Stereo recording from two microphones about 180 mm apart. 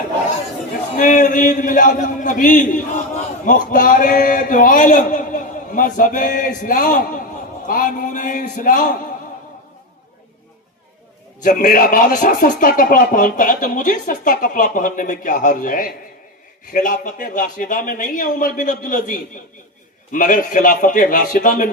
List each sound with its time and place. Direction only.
0.9 s a man's voice: 45° left (ahead or behind)
11.4 s a man's voice: 50° left (ahead or behind)